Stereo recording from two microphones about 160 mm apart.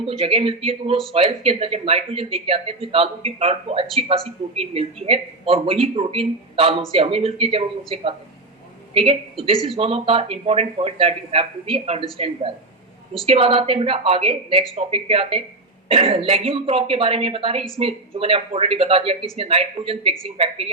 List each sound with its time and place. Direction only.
0.0 s a woman's voice: 35° right (ahead or behind)